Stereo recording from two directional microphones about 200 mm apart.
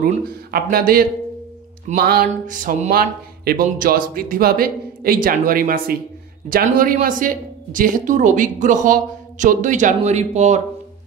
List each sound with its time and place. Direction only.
0.0 s speech: 45° right (ahead or behind)